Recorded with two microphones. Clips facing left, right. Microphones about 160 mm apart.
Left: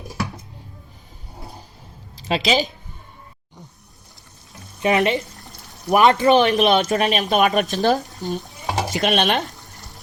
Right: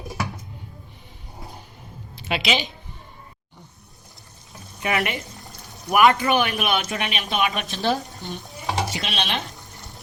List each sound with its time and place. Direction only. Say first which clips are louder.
2.2 s speech: left 5 dB; 35° left (ahead or behind)
4.8 s a man's voice: left 7 dB; 25° left (ahead or behind)
6.8 s speech: left 9 dB; 40° left (ahead or behind)
8.6 s stir: left 5 dB; 45° left (ahead or behind)